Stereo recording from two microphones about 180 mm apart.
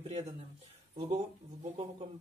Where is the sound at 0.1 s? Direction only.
35° right (ahead or behind).